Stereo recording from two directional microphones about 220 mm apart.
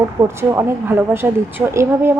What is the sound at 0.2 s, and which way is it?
Speech, 15° right (ahead or behind).